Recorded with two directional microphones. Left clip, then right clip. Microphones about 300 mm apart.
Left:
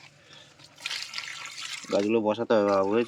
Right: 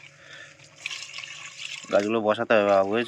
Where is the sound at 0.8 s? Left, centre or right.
Centre.